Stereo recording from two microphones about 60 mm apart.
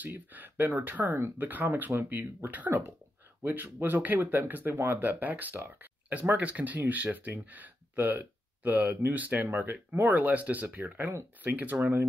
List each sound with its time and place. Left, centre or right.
0.0 s speech: right